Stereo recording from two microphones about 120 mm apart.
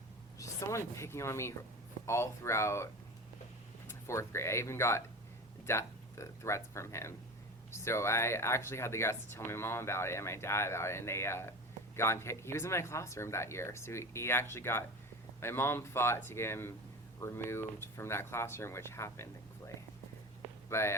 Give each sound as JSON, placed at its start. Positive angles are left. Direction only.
{"t": 0.3, "sound": "speech", "side_deg": 25}